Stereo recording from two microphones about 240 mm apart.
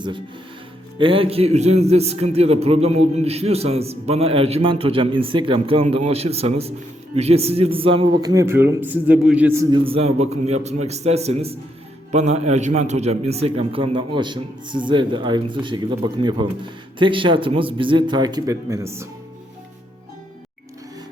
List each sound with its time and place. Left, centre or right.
0.9 s a man's voice: right